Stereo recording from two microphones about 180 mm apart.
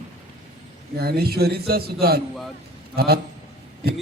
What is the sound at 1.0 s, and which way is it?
A man's voice, 60° right (ahead or behind).